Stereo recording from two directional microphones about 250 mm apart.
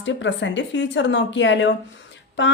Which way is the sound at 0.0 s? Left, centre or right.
Left.